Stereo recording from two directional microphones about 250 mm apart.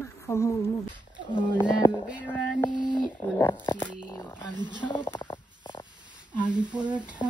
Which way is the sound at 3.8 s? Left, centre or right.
Centre.